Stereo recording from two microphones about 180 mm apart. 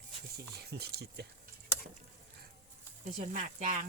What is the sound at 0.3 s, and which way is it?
Speech, 65° right (ahead or behind).